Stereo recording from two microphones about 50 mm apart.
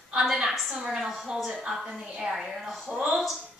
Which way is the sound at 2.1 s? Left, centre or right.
Centre.